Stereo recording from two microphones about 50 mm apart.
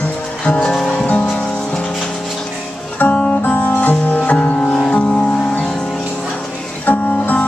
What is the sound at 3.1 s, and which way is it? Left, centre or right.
Music, left.